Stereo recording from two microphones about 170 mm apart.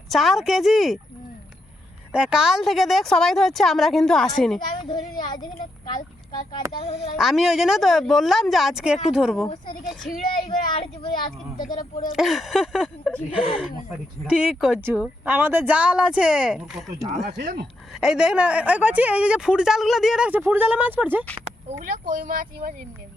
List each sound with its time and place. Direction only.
0.1 s speech: centre (ahead or behind)
2.1 s speech: 5° right (ahead or behind)
4.9 s a child's voice: 25° left (ahead or behind)
6.8 s speech: 40° left (ahead or behind)
7.2 s speech: centre (ahead or behind)
11.0 s a child's voice: 25° left (ahead or behind)
11.6 s speech: 55° left (ahead or behind)
12.1 s a woman's voice: centre (ahead or behind)
17.3 s speech: 65° right (ahead or behind)
18.0 s a woman's voice: 5° right (ahead or behind)
21.7 s speech: 55° right (ahead or behind)